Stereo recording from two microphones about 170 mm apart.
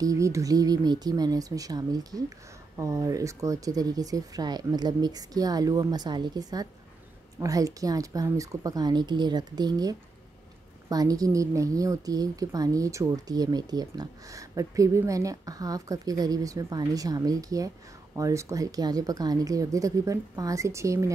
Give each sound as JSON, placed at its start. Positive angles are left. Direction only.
{"t": 0.0, "sound": "a woman's voice", "side_deg": -20}